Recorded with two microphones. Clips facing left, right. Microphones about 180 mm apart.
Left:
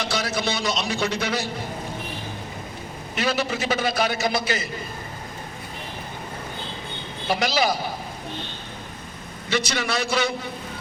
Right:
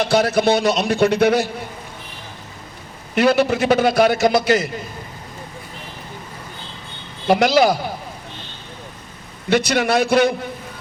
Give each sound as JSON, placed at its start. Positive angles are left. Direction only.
{"t": 0.0, "sound": "a man's voice", "side_deg": -55}
{"t": 3.2, "sound": "a man's voice", "side_deg": -65}
{"t": 7.3, "sound": "a man's voice", "side_deg": -65}
{"t": 9.5, "sound": "a man's voice", "side_deg": -55}